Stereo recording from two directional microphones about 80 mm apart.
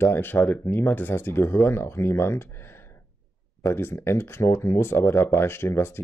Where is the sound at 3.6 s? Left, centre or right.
Left.